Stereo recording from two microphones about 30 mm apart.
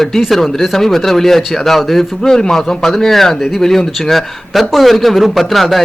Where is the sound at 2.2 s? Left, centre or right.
Left; by 5.8 s centre.